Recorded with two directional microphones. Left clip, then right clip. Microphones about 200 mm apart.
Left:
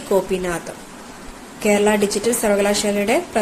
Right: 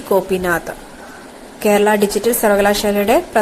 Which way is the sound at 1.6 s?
15° right (ahead or behind).